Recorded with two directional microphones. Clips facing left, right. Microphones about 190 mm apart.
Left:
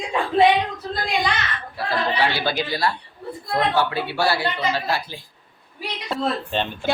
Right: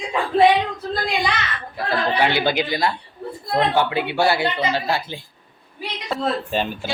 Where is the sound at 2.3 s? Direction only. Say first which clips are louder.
Right 4 dB; 20° right (ahead or behind).